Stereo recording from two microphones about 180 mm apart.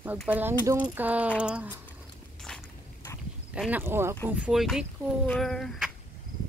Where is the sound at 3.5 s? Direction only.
10° right (ahead or behind).